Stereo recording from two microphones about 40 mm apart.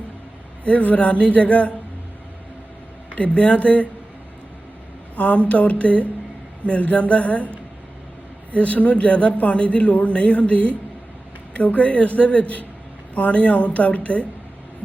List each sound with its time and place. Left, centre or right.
0.6 s speech: left
3.2 s speech: left
5.1 s speech: left
8.5 s speech: left